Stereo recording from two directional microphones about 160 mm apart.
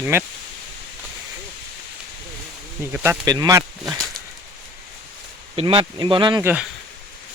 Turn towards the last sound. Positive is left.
turn(degrees=-10)  # may be behind; listen again after turning